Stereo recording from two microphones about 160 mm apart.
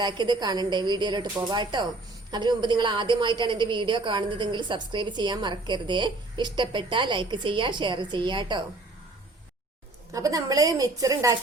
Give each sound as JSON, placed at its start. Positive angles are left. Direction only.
{"t": 0.0, "sound": "a woman's voice", "side_deg": -25}
{"t": 10.1, "sound": "a woman's voice", "side_deg": -20}